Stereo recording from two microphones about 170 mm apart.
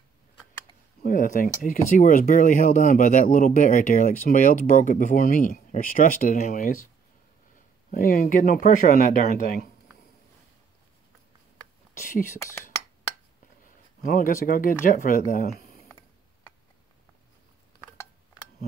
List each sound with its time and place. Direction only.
1.0 s speech: 50° left (ahead or behind)
7.9 s speech: 60° left (ahead or behind)
12.0 s speech: 50° left (ahead or behind)
12.4 s speech: 15° left (ahead or behind)
14.0 s speech: 50° left (ahead or behind)